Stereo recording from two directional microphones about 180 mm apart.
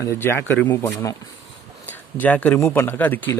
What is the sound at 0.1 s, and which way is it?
Speech, 15° left (ahead or behind).